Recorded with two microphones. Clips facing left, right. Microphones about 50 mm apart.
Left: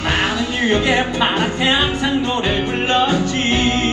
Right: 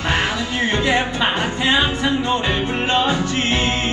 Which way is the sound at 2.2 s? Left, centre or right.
Right.